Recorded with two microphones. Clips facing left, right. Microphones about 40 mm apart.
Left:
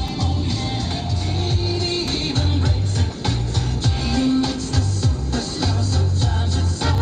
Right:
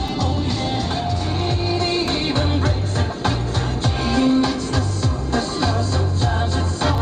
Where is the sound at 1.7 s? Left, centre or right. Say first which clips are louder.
Right 4 dB; centre.